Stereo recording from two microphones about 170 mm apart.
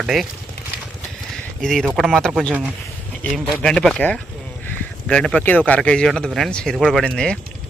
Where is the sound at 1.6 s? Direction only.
5° left (ahead or behind).